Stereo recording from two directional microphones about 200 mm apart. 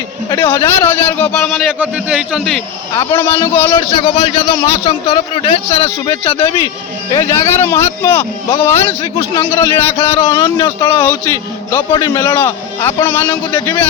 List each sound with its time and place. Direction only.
0.3 s a man's voice: 15° left (ahead or behind)
3.1 s a man's voice: 10° left (ahead or behind); by 5.9 s 30° left (ahead or behind)
7.1 s speech: 15° left (ahead or behind)
10.0 s a man's voice: 30° left (ahead or behind); by 13.7 s 10° left (ahead or behind)